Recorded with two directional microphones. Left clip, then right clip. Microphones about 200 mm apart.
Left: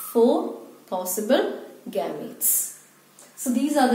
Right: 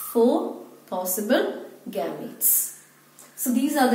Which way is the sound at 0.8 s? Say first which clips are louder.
Left 1 dB; 15° left (ahead or behind).